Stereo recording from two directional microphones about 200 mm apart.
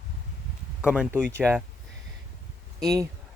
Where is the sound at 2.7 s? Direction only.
15° right (ahead or behind).